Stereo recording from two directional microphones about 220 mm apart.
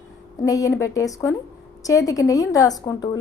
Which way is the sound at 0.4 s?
15° left (ahead or behind).